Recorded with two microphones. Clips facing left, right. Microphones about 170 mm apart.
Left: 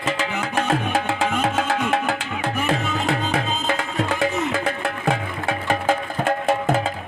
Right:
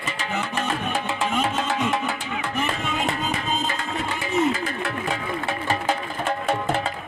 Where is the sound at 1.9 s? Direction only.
75° left (ahead or behind).